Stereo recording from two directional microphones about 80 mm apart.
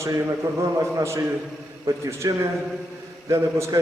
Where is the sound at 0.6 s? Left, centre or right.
Right.